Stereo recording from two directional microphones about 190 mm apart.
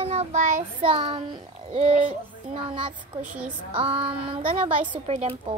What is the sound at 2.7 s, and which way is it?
A child's voice, 25° right (ahead or behind).